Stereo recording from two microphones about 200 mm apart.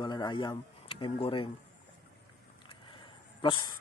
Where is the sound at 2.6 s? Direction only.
25° left (ahead or behind).